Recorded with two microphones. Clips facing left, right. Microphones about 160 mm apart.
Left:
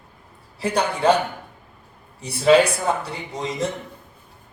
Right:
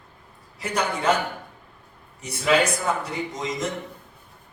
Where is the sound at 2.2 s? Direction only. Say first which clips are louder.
Left 6 dB; 30° left (ahead or behind).